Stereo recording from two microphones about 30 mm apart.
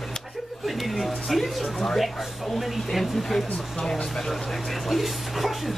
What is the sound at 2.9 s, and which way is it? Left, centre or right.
Speech, centre.